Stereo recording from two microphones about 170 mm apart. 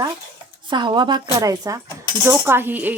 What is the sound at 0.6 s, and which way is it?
Speech, 30° right (ahead or behind).